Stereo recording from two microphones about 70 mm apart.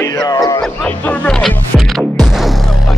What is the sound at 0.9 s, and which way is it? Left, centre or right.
Speech, left.